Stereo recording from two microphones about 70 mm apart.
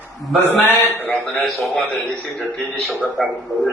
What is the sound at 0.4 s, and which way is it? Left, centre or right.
A man's voice, left.